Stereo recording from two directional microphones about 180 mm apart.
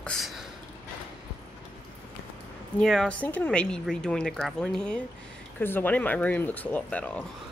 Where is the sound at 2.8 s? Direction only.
5° left (ahead or behind).